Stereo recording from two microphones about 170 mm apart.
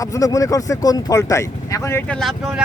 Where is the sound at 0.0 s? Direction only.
20° left (ahead or behind).